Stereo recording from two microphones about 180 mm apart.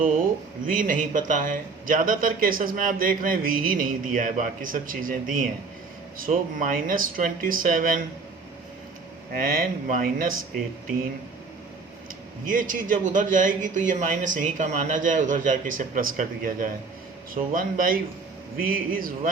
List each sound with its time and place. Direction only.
0.6 s speech: 50° right (ahead or behind)
9.3 s speech: 50° right (ahead or behind)
12.5 s speech: 45° right (ahead or behind)